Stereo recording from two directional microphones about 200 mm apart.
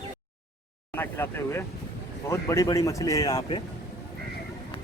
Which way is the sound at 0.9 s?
10° left (ahead or behind).